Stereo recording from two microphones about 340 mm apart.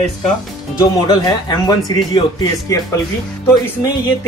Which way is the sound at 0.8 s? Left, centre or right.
Centre.